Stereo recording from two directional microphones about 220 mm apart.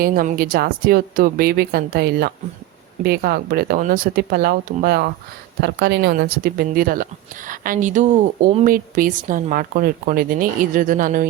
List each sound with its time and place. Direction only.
0.0 s a woman's voice: 40° right (ahead or behind)